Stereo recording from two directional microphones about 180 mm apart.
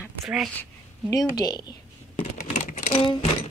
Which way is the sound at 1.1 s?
20° left (ahead or behind).